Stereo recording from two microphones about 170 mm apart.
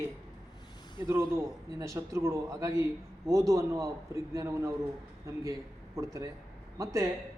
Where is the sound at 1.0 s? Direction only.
15° right (ahead or behind).